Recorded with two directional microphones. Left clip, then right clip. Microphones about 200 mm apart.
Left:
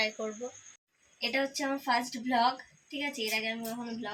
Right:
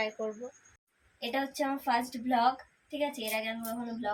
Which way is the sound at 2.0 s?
30° right (ahead or behind).